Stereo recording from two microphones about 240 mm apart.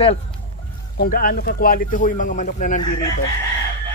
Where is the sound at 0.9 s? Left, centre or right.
Left.